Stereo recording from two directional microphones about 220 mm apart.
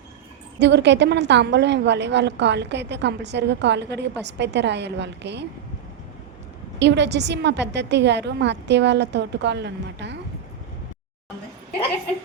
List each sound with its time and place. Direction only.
0.6 s a woman's voice: 50° right (ahead or behind)
6.7 s a woman's voice: 50° right (ahead or behind)